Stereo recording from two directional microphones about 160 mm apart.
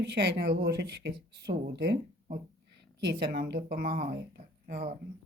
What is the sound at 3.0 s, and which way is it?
Speech, 80° right.